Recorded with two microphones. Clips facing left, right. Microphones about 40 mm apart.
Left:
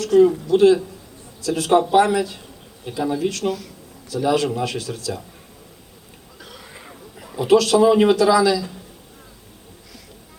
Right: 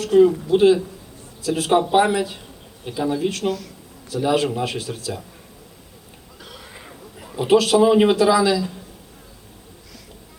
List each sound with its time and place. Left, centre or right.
0.1 s a man's voice: right
2.8 s a man's voice: centre
6.4 s a sound: centre
7.3 s a man's voice: right